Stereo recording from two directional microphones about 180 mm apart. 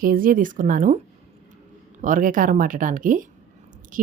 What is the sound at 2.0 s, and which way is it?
Speech, 45° right (ahead or behind).